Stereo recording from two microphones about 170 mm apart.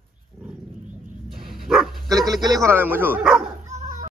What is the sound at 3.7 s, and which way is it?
Children playing, 50° right (ahead or behind).